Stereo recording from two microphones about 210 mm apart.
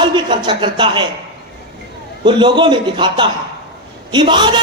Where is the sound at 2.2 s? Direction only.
20° right (ahead or behind).